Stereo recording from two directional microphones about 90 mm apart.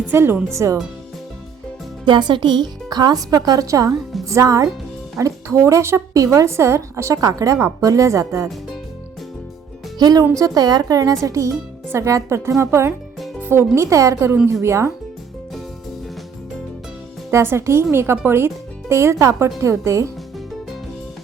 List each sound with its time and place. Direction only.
0.1 s speech: 25° right (ahead or behind)
2.0 s a woman's voice: 60° right (ahead or behind); by 8.4 s 35° right (ahead or behind)
10.0 s a woman's voice: 45° right (ahead or behind)
13.4 s music: 25° right (ahead or behind)
13.7 s speech: 35° right (ahead or behind)
17.3 s speech: 30° right (ahead or behind)